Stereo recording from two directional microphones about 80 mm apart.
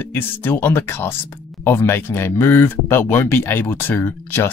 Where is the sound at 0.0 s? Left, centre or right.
Left.